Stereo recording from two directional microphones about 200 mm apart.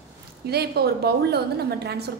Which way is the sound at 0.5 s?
55° right (ahead or behind).